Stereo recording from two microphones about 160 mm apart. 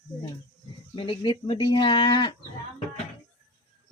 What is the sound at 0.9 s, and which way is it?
Speech, 30° left (ahead or behind).